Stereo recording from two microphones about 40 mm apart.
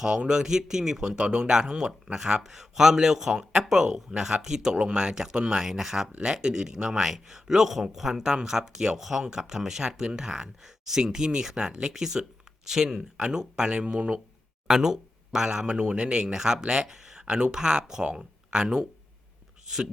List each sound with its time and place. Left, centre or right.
0.0 s speech: right